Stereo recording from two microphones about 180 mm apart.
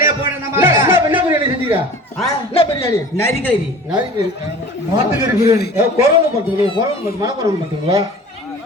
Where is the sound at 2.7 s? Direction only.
15° left (ahead or behind).